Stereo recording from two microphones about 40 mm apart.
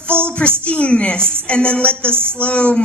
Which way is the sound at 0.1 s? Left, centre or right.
Left.